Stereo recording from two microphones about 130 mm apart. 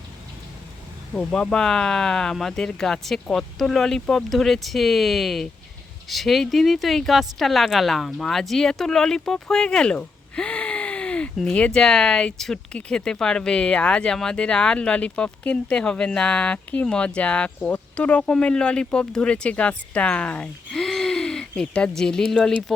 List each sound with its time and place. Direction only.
1.1 s speech: 5° left (ahead or behind)